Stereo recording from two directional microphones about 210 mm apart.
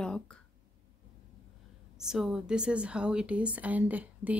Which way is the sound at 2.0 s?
Centre (ahead or behind).